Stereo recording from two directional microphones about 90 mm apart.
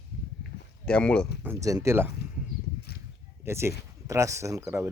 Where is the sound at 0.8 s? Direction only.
10° left (ahead or behind).